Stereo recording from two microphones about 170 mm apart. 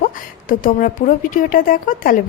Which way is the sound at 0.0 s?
55° left (ahead or behind).